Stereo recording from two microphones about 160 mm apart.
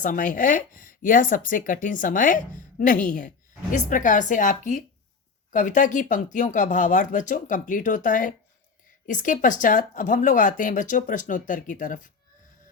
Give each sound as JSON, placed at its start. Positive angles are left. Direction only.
{"t": 0.0, "sound": "speech", "side_deg": 55}